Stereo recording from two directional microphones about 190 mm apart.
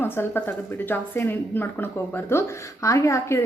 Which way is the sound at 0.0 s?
10° left (ahead or behind).